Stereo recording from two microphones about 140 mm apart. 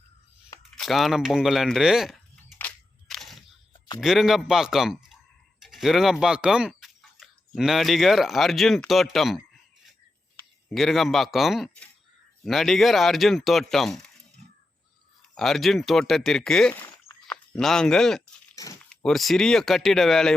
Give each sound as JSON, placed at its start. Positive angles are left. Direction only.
{"t": 0.8, "sound": "speech", "side_deg": 0}
{"t": 2.6, "sound": "crushing", "side_deg": 5}
{"t": 3.7, "sound": "a sound", "side_deg": 30}
{"t": 4.0, "sound": "speech", "side_deg": 0}
{"t": 10.8, "sound": "speech", "side_deg": 0}
{"t": 15.4, "sound": "speech", "side_deg": 0}